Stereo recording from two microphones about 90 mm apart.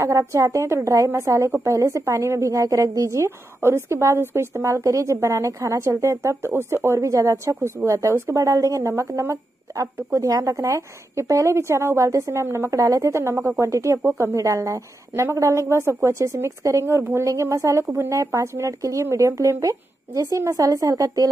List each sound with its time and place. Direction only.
0.0 s a woman's voice: 35° right (ahead or behind)